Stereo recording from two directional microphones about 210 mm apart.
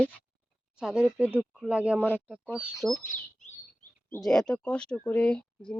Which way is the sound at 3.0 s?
40° left (ahead or behind).